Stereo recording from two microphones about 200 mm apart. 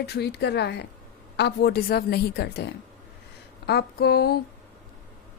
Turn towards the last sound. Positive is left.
turn(degrees=50)  # may be behind; listen again after turning